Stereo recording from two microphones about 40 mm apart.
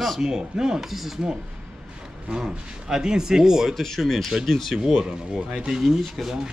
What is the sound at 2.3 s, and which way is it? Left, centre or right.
Speech, centre.